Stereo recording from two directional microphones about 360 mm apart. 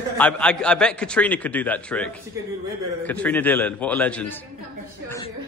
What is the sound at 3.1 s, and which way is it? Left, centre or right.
A woman's voice, centre.